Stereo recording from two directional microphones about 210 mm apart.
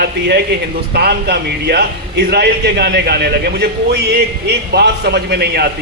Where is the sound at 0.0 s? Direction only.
50° right (ahead or behind).